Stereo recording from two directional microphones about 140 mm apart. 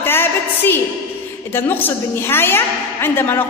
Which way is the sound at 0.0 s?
15° left (ahead or behind).